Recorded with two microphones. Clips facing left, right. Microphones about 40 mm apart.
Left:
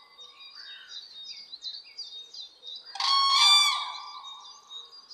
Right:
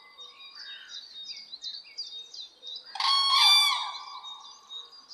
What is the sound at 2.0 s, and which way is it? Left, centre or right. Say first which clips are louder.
Bird vocalization: right 2 dB; left.